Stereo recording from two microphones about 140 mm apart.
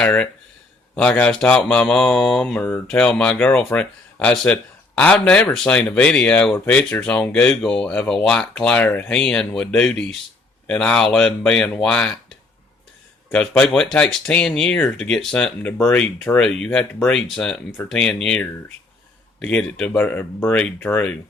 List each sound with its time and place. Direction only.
0.0 s speech: 10° left (ahead or behind)
13.3 s speech: 5° left (ahead or behind)